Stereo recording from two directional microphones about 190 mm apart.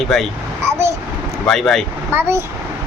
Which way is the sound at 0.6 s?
15° right (ahead or behind).